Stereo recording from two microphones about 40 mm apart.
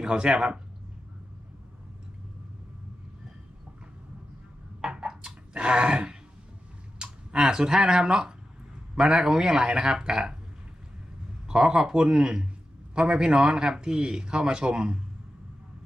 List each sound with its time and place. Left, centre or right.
0.0 s speech: right
4.8 s a sound: centre
7.0 s speech: right
11.4 s speech: centre